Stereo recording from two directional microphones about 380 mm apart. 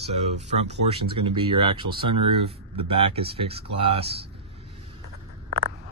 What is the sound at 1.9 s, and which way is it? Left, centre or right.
Speech, centre.